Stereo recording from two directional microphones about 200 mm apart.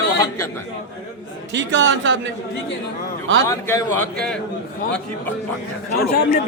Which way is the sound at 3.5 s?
15° left (ahead or behind).